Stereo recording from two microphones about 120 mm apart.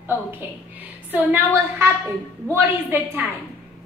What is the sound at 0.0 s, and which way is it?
Speech, 20° right (ahead or behind).